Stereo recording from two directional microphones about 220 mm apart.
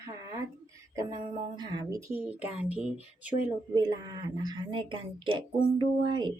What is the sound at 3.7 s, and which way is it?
Speech, 20° right (ahead or behind).